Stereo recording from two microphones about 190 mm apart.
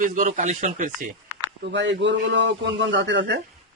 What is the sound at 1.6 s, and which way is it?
A man's voice, 70° right (ahead or behind).